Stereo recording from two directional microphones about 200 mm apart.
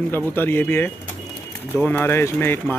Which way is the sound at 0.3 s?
10° left (ahead or behind).